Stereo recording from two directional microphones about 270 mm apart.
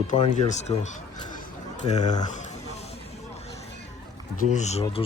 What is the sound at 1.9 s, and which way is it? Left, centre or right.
Speech, centre.